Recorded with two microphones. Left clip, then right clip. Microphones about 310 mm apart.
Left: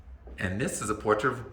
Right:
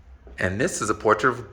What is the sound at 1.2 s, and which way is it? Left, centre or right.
Speech, centre.